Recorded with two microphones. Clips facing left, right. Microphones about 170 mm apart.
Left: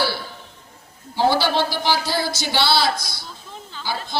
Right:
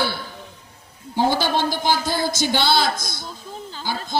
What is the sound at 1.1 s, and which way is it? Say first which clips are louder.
A man's voice: left 1 dB; 50° right (ahead or behind).